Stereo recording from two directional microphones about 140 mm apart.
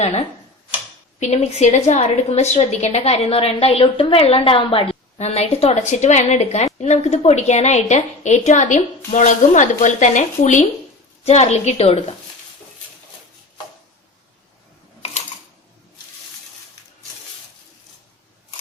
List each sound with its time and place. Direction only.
0.0 s a woman's voice: 50° left (ahead or behind)
11.2 s a woman's voice: 50° left (ahead or behind)